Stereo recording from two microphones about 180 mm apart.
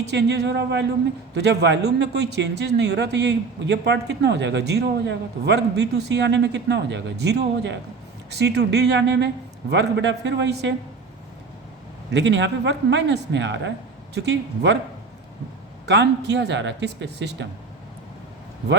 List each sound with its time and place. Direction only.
0.1 s a man's voice: 70° right (ahead or behind)
12.1 s a man's voice: 75° right (ahead or behind)
15.9 s a man's voice: 70° right (ahead or behind)